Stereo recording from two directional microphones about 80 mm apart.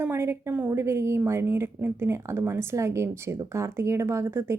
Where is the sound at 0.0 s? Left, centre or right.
Right.